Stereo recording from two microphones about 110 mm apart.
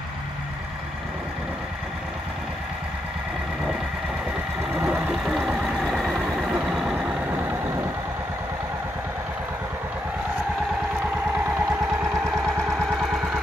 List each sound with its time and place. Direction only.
4.7 s vehicle: 10° right (ahead or behind)
7.0 s vehicle: 15° right (ahead or behind)